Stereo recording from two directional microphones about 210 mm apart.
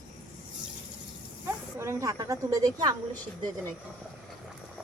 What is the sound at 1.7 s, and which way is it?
A woman's voice, 15° right (ahead or behind).